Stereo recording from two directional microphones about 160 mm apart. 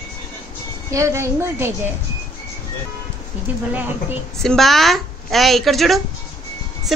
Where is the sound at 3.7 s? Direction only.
10° right (ahead or behind).